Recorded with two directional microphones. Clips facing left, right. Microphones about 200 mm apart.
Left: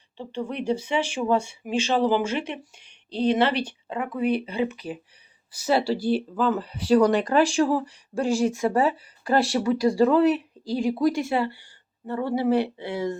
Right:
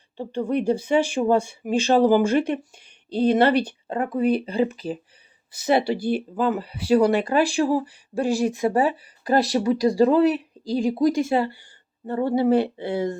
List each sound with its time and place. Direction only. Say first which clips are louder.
0.2 s speech: right 6 dB; 45° right (ahead or behind)
5.5 s speech: right 2 dB; 20° right (ahead or behind)
6.0 s speech: even; 50° right (ahead or behind)
6.3 s speech: right 1 dB; 10° right (ahead or behind)
8.3 s speech: even; 35° right (ahead or behind)
8.6 s speech: right 1 dB; 15° right (ahead or behind); by 13.1 s 30° right (ahead or behind)